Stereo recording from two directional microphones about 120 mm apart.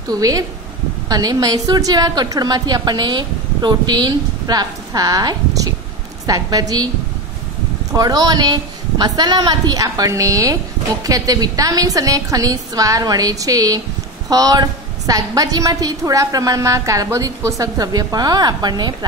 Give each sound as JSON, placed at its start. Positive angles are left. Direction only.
{"t": 0.1, "sound": "a woman's voice", "side_deg": -30}
{"t": 7.9, "sound": "a woman's voice", "side_deg": -30}